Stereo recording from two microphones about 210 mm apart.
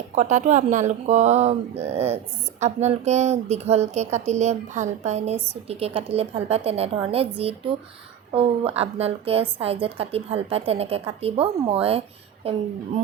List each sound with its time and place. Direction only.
0.1 s a woman's voice: 35° right (ahead or behind)